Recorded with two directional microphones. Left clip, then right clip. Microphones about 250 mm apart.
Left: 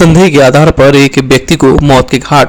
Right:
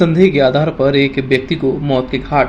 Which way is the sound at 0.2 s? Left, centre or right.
Left.